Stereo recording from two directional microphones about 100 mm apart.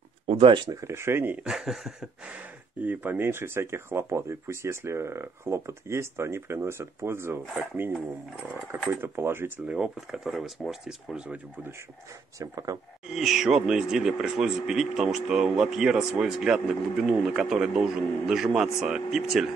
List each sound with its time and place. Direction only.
0.3 s speech: 60° right (ahead or behind)
0.7 s speech: 30° right (ahead or behind)
1.4 s speech: 5° right (ahead or behind)
2.8 s speech: 15° right (ahead or behind)
8.5 s speech: centre (ahead or behind)
8.9 s speech: 25° right (ahead or behind)
9.8 s speech: 5° right (ahead or behind)
12.4 s speech: 35° right (ahead or behind)
13.1 s speech: 5° right (ahead or behind)